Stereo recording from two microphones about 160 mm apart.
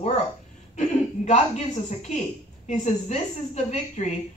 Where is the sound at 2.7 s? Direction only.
45° left (ahead or behind).